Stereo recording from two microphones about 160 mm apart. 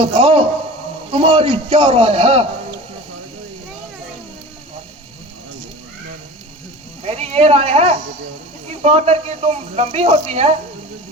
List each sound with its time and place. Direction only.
0.0 s a man's voice: 40° right (ahead or behind)
7.0 s speech: 40° right (ahead or behind)